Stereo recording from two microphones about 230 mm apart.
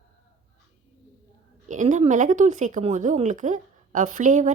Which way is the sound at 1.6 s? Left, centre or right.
Right.